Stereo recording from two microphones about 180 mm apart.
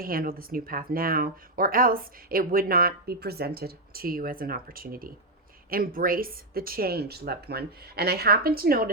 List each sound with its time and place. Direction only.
0.0 s speech: 55° right (ahead or behind)